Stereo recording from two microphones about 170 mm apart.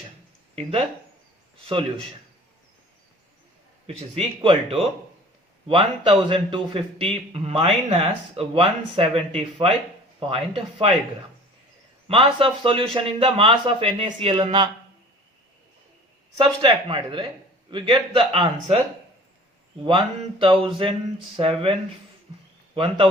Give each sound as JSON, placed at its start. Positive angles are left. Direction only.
{"t": 0.5, "sound": "a man's voice", "side_deg": -35}
{"t": 3.8, "sound": "a man's voice", "side_deg": -35}
{"t": 12.0, "sound": "a man's voice", "side_deg": -30}
{"t": 16.4, "sound": "a man's voice", "side_deg": -30}
{"t": 19.8, "sound": "a man's voice", "side_deg": -30}